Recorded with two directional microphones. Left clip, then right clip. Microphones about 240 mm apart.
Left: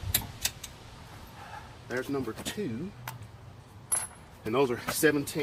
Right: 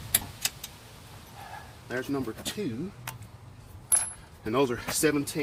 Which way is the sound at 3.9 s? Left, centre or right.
Centre.